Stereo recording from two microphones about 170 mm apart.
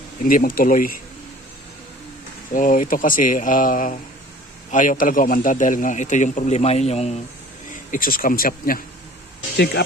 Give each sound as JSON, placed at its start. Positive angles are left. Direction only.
{"t": 0.2, "sound": "speech", "side_deg": 55}
{"t": 2.5, "sound": "a man's voice", "side_deg": 50}
{"t": 7.9, "sound": "speech", "side_deg": 55}
{"t": 9.6, "sound": "speech", "side_deg": 75}